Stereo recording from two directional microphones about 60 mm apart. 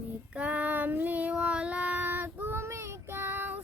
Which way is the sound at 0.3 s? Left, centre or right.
Right.